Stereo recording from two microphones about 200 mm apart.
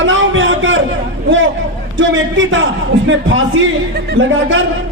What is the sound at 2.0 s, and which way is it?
A man's voice, 70° right (ahead or behind).